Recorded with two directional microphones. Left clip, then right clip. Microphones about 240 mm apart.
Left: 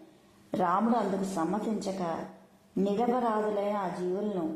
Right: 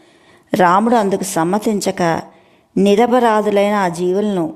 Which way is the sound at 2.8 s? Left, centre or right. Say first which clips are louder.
Right 16 dB; right.